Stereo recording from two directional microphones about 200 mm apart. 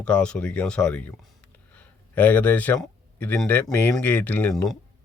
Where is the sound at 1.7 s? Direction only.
5° left (ahead or behind).